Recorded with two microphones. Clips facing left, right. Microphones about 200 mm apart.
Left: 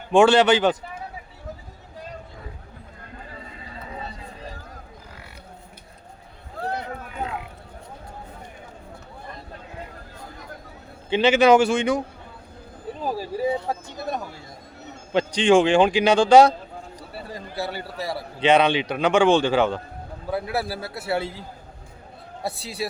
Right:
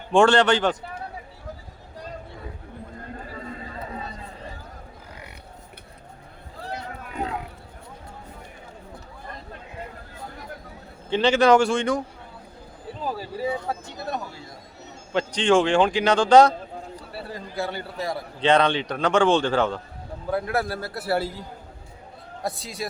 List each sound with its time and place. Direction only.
0.1 s a man's voice: 5° left (ahead or behind)
6.6 s a sound: 55° left (ahead or behind)
11.1 s a man's voice: 5° left (ahead or behind)
13.1 s speech: 15° left (ahead or behind)
18.0 s a man's voice: 10° left (ahead or behind)